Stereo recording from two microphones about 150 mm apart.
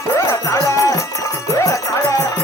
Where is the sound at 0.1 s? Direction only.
20° left (ahead or behind).